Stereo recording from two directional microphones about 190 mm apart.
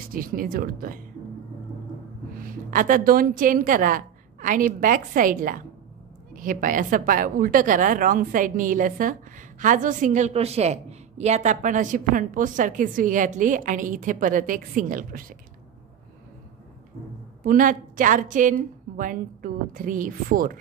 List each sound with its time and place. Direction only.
0.1 s a woman's voice: 50° right (ahead or behind)
2.3 s a woman's voice: 45° right (ahead or behind)
17.4 s a woman's voice: 45° right (ahead or behind)